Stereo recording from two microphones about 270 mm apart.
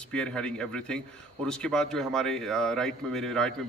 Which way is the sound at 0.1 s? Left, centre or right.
Centre.